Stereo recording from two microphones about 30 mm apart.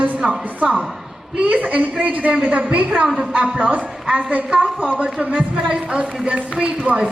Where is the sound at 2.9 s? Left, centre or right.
Right.